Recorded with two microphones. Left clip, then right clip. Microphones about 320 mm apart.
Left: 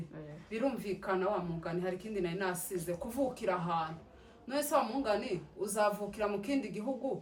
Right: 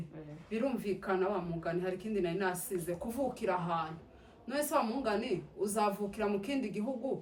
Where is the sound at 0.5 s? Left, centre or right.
Centre.